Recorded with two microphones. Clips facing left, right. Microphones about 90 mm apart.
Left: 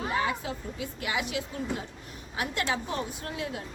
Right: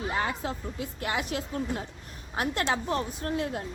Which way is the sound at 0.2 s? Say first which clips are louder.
Even; 40° right (ahead or behind).